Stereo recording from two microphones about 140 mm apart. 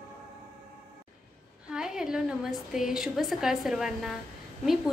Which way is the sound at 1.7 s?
5° right (ahead or behind).